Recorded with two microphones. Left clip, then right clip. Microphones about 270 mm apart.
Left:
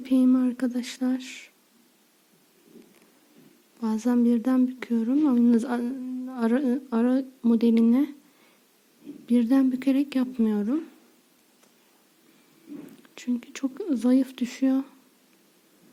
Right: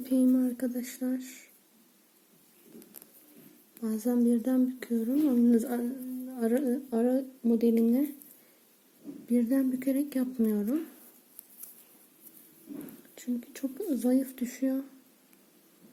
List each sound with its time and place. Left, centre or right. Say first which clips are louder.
0.0 s speech: left 4 dB; left
3.8 s speech: left 4 dB; left
9.2 s speech: left 6 dB; left
13.1 s speech: left 5 dB; left